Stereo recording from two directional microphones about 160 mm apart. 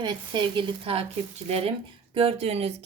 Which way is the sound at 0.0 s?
30° right (ahead or behind).